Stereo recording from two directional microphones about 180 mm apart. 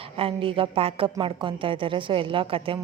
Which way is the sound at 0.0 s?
30° right (ahead or behind).